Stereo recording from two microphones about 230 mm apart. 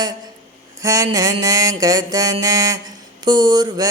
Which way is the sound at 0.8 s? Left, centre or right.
Centre.